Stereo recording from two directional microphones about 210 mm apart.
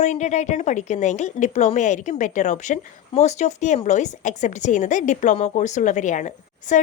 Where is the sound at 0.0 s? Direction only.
35° left (ahead or behind).